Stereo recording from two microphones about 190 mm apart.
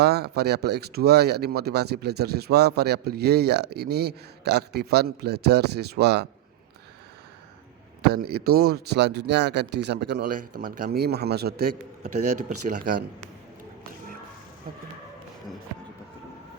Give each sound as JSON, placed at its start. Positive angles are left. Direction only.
{"t": 0.0, "sound": "speech", "side_deg": -55}
{"t": 8.0, "sound": "speech", "side_deg": -55}
{"t": 12.0, "sound": "speech", "side_deg": -40}